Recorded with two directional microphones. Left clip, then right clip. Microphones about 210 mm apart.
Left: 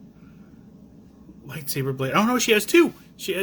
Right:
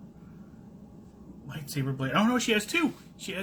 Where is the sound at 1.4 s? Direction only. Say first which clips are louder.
Left 7 dB; 45° left (ahead or behind).